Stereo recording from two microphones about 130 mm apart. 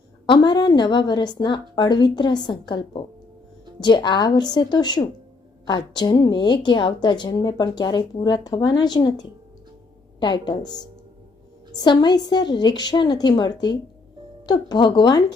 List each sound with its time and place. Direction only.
0.3 s a woman's voice: 35° left (ahead or behind)